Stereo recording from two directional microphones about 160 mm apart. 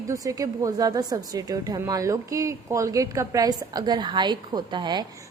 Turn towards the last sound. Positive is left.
turn(degrees=-25)  # may be behind; listen again after turning